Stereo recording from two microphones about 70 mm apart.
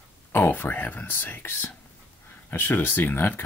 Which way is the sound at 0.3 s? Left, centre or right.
Left.